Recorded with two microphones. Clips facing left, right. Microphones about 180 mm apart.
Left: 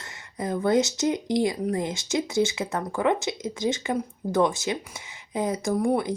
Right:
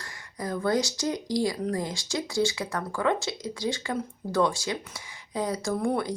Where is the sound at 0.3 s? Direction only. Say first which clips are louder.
Left 4 dB; 20° left (ahead or behind).